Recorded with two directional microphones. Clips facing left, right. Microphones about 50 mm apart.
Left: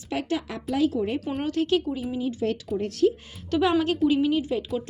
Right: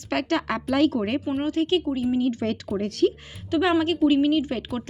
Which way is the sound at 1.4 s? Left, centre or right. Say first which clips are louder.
Even; right.